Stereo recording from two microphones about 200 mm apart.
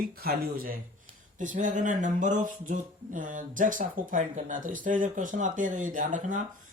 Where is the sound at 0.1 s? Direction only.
50° right (ahead or behind).